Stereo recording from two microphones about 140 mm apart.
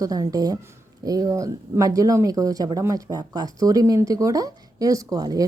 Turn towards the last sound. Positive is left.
turn(degrees=-25)  # may be behind; listen again after turning